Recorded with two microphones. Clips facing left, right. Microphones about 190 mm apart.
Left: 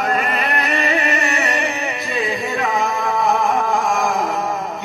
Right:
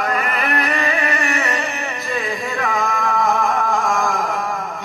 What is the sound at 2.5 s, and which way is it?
Singing, 20° left (ahead or behind).